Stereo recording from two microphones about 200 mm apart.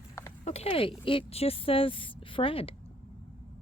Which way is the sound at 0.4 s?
30° left (ahead or behind).